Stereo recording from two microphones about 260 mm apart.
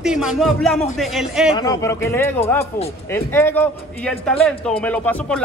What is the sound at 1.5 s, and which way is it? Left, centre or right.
A man's voice, centre.